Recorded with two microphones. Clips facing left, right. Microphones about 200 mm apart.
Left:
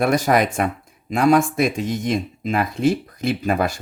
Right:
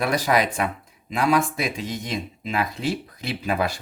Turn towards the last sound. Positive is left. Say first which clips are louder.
# left 4 dB
turn(degrees=50)  # may be behind; listen again after turning